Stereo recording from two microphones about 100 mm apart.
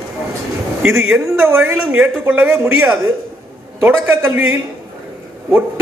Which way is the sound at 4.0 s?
25° right (ahead or behind).